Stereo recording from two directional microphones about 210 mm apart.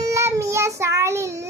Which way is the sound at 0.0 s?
15° right (ahead or behind).